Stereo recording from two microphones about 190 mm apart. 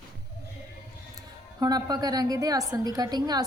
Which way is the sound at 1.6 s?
20° right (ahead or behind).